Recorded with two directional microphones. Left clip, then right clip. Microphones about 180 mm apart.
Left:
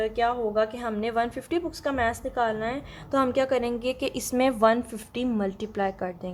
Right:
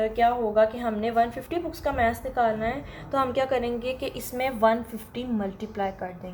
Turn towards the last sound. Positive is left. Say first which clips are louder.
# left 2 dB
turn(degrees=55)  # may be behind; listen again after turning